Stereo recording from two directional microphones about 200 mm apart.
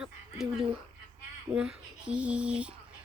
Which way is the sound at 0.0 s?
Centre (ahead or behind).